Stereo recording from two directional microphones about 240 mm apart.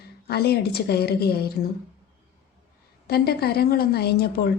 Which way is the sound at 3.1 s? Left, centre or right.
Left.